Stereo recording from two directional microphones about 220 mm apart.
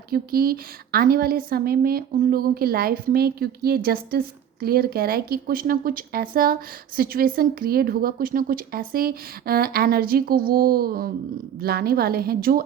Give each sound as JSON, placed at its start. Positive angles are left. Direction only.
{"t": 0.1, "sound": "a woman's voice", "side_deg": -40}